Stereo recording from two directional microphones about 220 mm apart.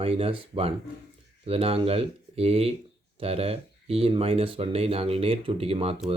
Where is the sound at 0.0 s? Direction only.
25° right (ahead or behind).